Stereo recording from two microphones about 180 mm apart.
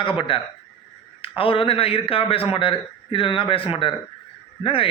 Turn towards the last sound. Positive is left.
turn(degrees=30)  # may be behind; listen again after turning